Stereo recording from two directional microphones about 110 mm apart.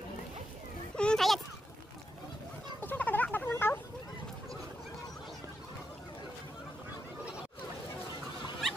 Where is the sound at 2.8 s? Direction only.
15° left (ahead or behind).